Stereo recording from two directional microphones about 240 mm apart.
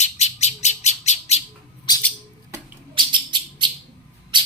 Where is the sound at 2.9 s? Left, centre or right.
Centre.